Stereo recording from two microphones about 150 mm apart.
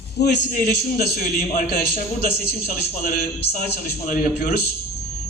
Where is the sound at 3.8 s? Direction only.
75° left (ahead or behind).